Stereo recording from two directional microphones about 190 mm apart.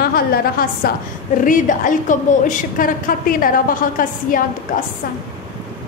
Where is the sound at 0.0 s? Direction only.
50° left (ahead or behind).